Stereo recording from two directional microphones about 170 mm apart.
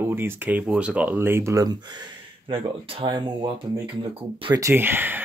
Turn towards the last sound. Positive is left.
turn(degrees=-10)  # may be behind; listen again after turning